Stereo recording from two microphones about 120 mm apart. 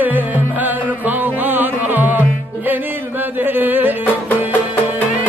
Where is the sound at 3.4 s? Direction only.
15° right (ahead or behind).